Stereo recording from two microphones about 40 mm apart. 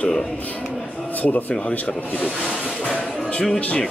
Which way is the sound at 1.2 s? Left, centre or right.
Left.